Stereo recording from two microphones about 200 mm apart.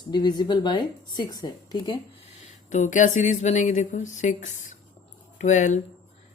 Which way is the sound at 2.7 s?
40° left (ahead or behind).